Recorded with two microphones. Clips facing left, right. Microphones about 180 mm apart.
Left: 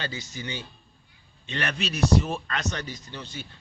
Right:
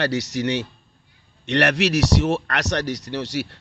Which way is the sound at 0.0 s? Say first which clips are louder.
Right 13 dB; 75° right (ahead or behind).